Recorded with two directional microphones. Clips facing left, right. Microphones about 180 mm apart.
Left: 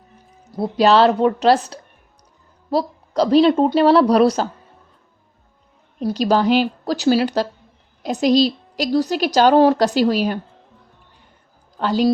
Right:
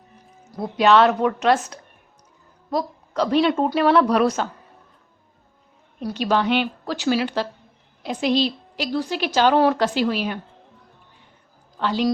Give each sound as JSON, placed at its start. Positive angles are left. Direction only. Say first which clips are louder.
{"t": 0.4, "sound": "a woman's voice", "louder": "left 3 dB", "side_deg": 35}
{"t": 6.0, "sound": "a woman's voice", "louder": "left 4 dB", "side_deg": 30}
{"t": 11.8, "sound": "a woman's voice", "louder": "left 4 dB", "side_deg": 40}